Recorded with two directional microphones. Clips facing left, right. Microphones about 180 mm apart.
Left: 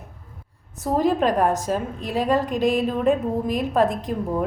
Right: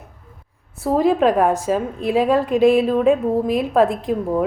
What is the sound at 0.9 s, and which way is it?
A woman's voice, 5° right (ahead or behind).